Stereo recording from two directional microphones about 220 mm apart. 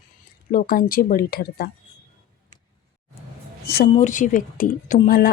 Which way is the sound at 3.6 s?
45° left (ahead or behind).